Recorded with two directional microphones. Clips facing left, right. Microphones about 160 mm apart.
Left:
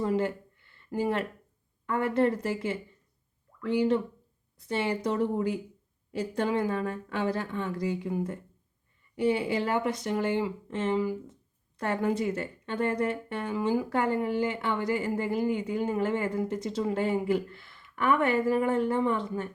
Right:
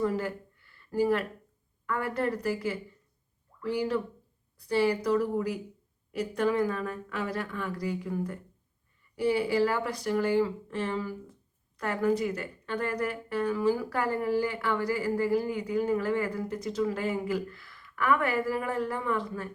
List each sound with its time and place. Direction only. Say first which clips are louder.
0.0 s a sound: left 2 dB; 25° left (ahead or behind)
1.9 s a woman's voice: left 4 dB; 25° left (ahead or behind)
11.8 s a woman's voice: right 1 dB; 25° left (ahead or behind)